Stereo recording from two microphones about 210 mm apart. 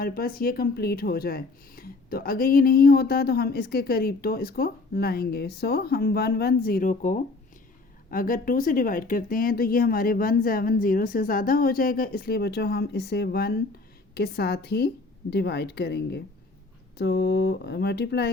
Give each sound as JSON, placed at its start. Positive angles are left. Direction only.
{"t": 0.0, "sound": "speech", "side_deg": 45}